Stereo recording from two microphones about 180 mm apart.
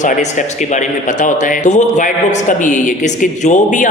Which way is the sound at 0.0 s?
40° left (ahead or behind).